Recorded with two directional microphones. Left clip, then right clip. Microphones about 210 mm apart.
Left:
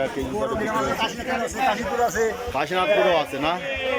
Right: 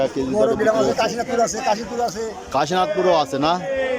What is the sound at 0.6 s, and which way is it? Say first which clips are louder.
Speech: right 6 dB; 55° right (ahead or behind).